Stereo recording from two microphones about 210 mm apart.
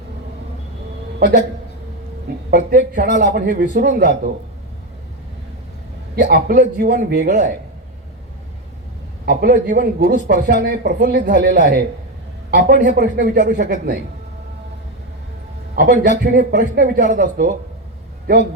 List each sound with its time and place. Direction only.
2.5 s a man's voice: 45° right (ahead or behind)
6.1 s a man's voice: 45° right (ahead or behind)
9.2 s a man's voice: 50° right (ahead or behind)
11.6 s a man's voice: 55° right (ahead or behind)
15.7 s a man's voice: 45° right (ahead or behind)
17.0 s speech: 40° right (ahead or behind)